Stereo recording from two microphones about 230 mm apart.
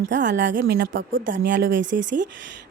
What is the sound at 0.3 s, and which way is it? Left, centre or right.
Speech, right.